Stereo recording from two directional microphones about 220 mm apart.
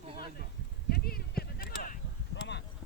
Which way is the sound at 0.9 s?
45° left (ahead or behind).